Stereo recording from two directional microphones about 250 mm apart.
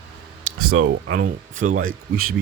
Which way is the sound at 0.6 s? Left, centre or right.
Right.